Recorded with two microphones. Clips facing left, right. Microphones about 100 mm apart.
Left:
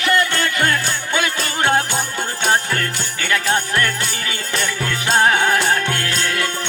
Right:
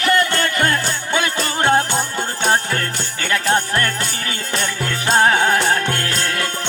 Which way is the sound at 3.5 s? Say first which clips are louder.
Right 1 dB; 35° right (ahead or behind).